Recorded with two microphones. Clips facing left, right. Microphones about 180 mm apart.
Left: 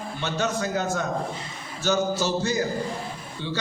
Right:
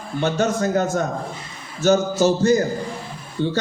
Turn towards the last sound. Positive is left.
turn(degrees=-45)  # may be behind; listen again after turning